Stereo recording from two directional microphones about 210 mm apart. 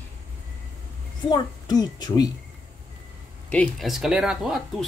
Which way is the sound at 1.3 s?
20° left (ahead or behind).